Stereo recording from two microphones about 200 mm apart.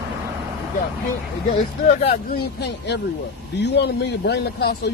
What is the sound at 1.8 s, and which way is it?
A man's voice, 45° left (ahead or behind).